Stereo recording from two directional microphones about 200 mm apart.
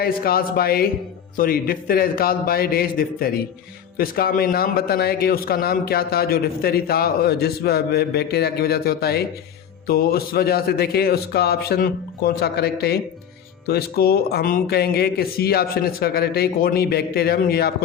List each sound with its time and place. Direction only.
0.0 s a man's voice: 50° left (ahead or behind)